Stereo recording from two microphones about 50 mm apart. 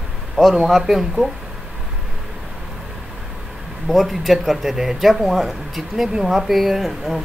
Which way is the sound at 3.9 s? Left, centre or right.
Centre.